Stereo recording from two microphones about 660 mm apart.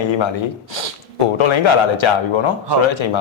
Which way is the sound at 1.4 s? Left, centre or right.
Left.